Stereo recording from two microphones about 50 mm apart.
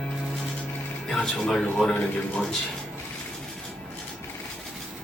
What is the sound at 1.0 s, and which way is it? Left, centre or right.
Speech, centre.